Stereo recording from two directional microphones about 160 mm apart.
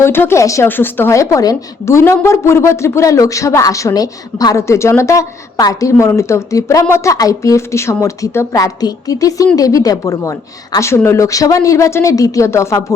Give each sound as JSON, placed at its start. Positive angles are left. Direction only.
{"t": 0.0, "sound": "a woman's voice", "side_deg": 15}